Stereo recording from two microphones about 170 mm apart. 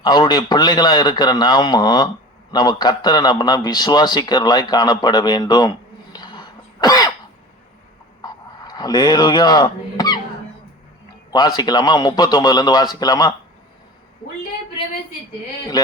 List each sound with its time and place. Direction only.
0.0 s a man's voice: 25° left (ahead or behind)
6.1 s throat clearing: 25° left (ahead or behind)
8.2 s a sound: 25° left (ahead or behind)
11.3 s a man's voice: 25° left (ahead or behind)